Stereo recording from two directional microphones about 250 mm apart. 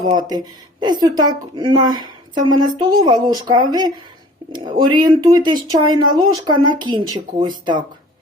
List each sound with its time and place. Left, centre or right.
0.2 s speech: centre